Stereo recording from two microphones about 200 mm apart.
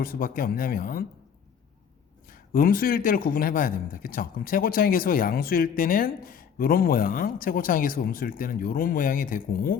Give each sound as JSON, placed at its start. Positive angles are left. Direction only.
{"t": 0.0, "sound": "a man's voice", "side_deg": 45}
{"t": 2.3, "sound": "a man's voice", "side_deg": 45}